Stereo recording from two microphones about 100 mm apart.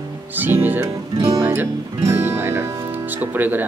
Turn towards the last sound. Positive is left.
turn(degrees=-20)  # may be behind; listen again after turning